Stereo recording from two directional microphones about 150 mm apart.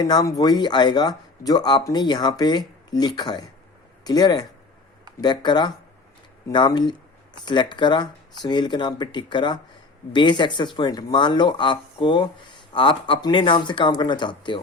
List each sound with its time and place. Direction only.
0.0 s speech: 25° left (ahead or behind)